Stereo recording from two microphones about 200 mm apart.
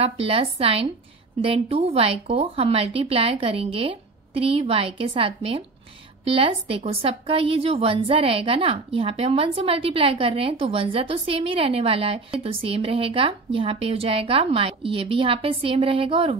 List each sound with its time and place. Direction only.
0.0 s a woman's voice: 30° right (ahead or behind)